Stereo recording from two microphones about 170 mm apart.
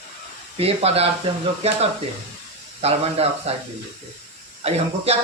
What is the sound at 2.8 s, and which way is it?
Speech, 35° right (ahead or behind).